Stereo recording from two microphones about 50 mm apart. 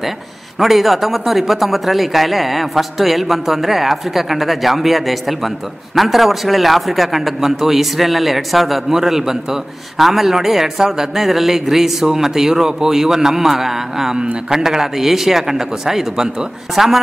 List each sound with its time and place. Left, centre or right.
0.6 s a man's voice: centre